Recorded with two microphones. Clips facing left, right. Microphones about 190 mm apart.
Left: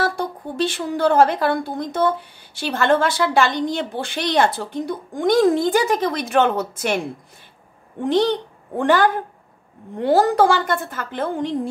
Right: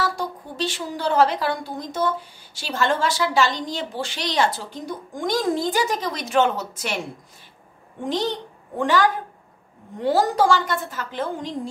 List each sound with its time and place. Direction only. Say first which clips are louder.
0.0 s a woman's voice: left 3 dB; 55° left (ahead or behind)
8.0 s a woman's voice: left 7 dB; 60° left (ahead or behind)